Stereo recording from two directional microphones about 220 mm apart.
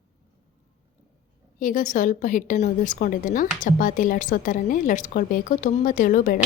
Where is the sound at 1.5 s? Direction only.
40° left (ahead or behind).